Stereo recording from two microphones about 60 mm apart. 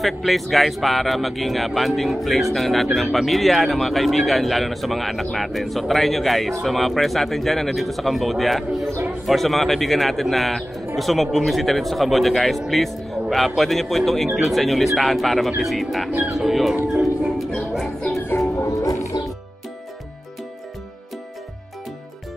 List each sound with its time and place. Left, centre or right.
0.0 s speech: centre
18.6 s music: left